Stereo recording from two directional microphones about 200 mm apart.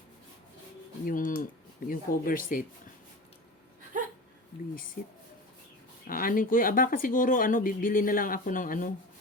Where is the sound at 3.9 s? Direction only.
40° right (ahead or behind).